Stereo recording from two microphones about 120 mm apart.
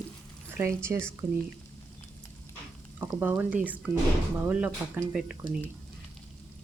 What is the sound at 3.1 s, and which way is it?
Speech, 15° right (ahead or behind).